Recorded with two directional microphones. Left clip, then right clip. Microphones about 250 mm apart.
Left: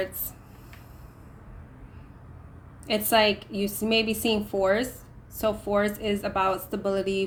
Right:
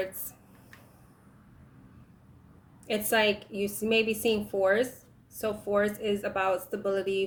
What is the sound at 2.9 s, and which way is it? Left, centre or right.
A woman's voice, centre.